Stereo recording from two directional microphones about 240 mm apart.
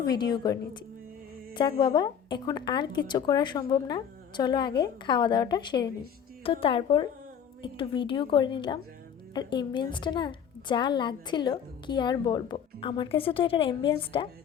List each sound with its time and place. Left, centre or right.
0.0 s a woman's voice: centre